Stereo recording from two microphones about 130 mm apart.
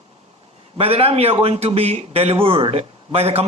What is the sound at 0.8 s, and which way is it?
Speech, 50° right (ahead or behind).